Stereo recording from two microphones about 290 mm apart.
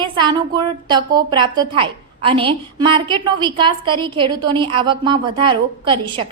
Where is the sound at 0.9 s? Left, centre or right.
Centre.